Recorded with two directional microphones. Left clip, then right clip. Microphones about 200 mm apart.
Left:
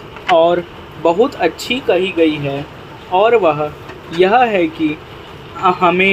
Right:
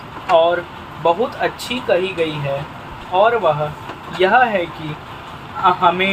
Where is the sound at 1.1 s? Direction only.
45° left (ahead or behind).